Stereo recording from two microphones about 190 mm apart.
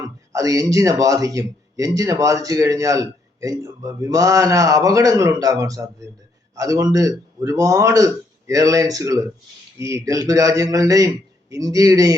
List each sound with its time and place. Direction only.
0.0 s speech: 20° right (ahead or behind)